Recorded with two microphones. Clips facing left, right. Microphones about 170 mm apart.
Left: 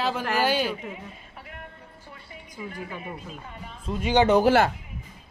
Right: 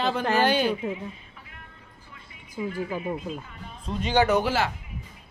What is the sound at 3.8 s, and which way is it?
Speech, 5° left (ahead or behind).